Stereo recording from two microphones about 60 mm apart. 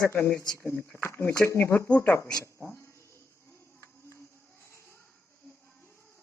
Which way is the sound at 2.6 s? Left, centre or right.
Left.